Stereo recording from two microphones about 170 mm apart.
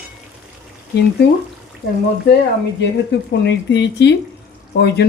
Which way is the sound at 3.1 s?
90° left.